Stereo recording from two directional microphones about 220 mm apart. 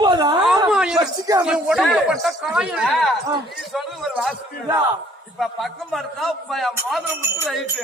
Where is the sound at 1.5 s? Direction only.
5° right (ahead or behind).